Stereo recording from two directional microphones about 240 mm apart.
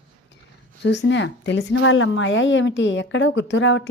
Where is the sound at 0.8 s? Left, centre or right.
Left.